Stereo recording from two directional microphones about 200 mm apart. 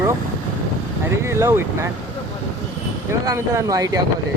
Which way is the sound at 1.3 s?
10° right (ahead or behind).